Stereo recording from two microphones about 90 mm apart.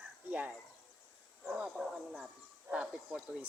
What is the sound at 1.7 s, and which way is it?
Speech, 5° right (ahead or behind).